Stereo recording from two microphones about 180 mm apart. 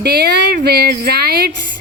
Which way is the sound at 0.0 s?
65° right (ahead or behind).